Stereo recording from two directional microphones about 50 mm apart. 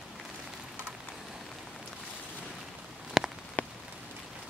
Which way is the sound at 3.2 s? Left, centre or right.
Centre.